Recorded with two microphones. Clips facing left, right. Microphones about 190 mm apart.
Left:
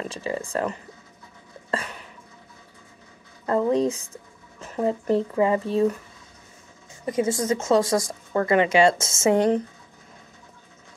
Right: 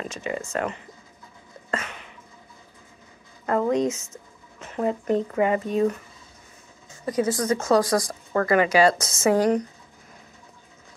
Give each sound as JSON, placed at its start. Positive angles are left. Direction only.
{"t": 0.1, "sound": "speech", "side_deg": 30}
{"t": 1.7, "sound": "a sound", "side_deg": 35}
{"t": 3.4, "sound": "speech", "side_deg": 30}
{"t": 7.1, "sound": "speech", "side_deg": 25}